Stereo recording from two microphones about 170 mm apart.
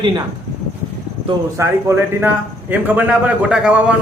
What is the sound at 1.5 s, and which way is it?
A man's voice, 15° right (ahead or behind).